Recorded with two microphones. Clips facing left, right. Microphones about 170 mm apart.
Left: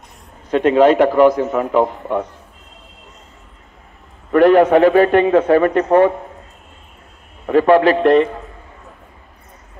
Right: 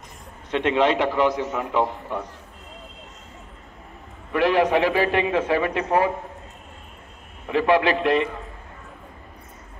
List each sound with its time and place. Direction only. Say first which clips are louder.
0.5 s a man's voice: left 8 dB; 45° left (ahead or behind)
4.3 s a man's voice: left 9 dB; 50° left (ahead or behind)
7.4 s a man's voice: left 8 dB; 50° left (ahead or behind)